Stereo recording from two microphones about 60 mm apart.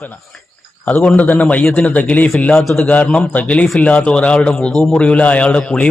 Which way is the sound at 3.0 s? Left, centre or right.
Centre.